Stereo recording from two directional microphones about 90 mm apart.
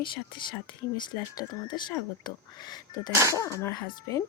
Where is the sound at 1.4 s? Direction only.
55° left (ahead or behind).